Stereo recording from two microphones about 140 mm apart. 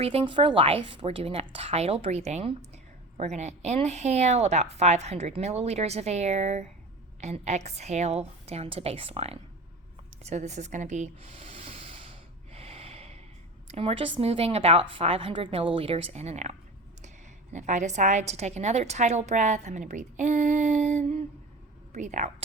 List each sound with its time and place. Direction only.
0.0 s speech: 45° right (ahead or behind)
10.2 s speech: 55° right (ahead or behind)
12.5 s snort: 45° right (ahead or behind)
13.7 s a woman's voice: 45° right (ahead or behind); by 22.3 s 60° right (ahead or behind)